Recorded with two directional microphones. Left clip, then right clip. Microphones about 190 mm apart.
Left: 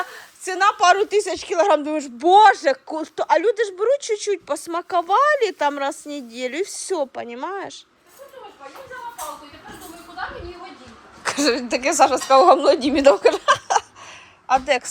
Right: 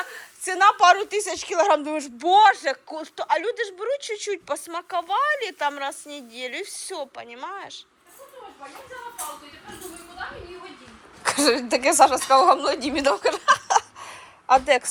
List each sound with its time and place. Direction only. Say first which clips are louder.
0.1 s a woman's voice: left 1 dB; 15° left (ahead or behind)
11.2 s a woman's voice: even; 15° left (ahead or behind)
14.1 s a sound: right 1 dB; 10° left (ahead or behind)